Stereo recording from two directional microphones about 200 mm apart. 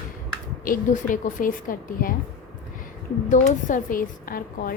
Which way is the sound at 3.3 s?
40° left (ahead or behind).